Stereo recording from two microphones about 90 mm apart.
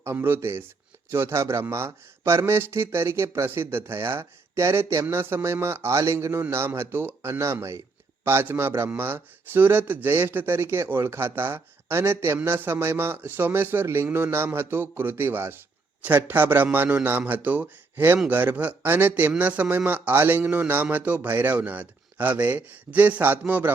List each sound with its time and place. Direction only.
0.0 s a man's voice: 25° right (ahead or behind)